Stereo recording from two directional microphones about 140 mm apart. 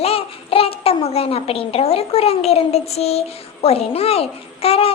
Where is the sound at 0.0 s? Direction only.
45° left (ahead or behind).